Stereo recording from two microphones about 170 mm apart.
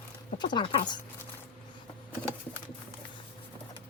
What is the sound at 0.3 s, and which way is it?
Speech, 25° left (ahead or behind).